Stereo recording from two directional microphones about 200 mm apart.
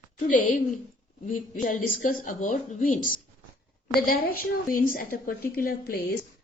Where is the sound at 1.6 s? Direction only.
40° left (ahead or behind).